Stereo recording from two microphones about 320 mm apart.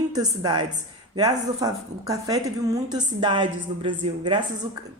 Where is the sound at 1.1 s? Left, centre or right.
Centre.